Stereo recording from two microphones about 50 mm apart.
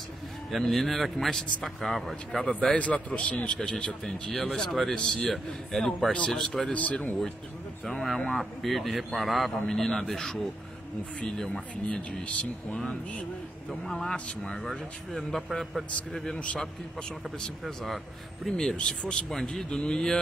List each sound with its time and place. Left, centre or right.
0.5 s speech: centre
2.7 s a man's voice: left
3.5 s speech: centre
6.7 s a man's voice: left
7.8 s speech: centre
12.7 s a man's voice: left
13.7 s speech: centre
14.1 s speech: centre
17.6 s speech: centre
18.8 s speech: centre